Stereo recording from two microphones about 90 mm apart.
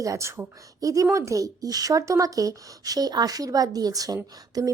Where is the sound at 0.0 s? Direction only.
35° right (ahead or behind).